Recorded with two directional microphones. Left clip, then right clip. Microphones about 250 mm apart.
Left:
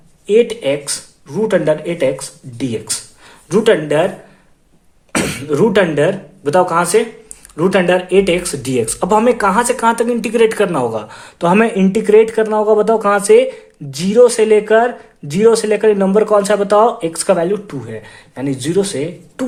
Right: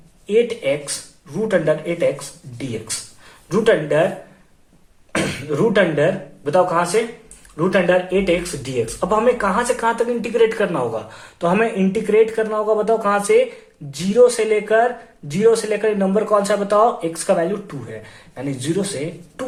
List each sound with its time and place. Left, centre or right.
0.3 s speech: left
5.1 s speech: left